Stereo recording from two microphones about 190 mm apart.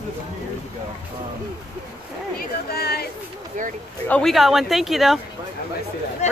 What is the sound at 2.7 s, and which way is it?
Speech, 55° left (ahead or behind).